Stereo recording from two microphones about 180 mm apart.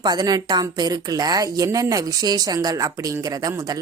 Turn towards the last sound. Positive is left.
turn(degrees=-20)  # may be behind; listen again after turning